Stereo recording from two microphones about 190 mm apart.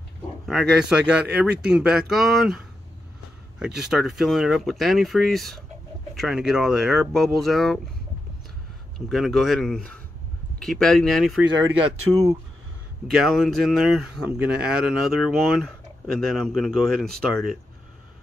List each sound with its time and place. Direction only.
0.5 s speech: 5° right (ahead or behind)
8.9 s speech: centre (ahead or behind)
11.8 s speech: 20° right (ahead or behind)
13.1 s speech: centre (ahead or behind)